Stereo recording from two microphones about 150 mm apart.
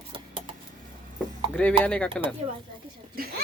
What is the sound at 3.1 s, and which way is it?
Speech, 80° right.